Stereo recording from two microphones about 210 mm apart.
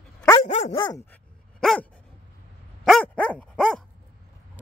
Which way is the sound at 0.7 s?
20° left (ahead or behind).